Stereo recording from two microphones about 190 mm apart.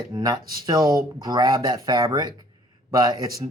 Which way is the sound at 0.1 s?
20° right (ahead or behind).